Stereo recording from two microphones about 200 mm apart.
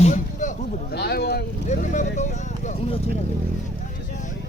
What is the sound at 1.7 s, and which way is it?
Vehicle, 40° left (ahead or behind).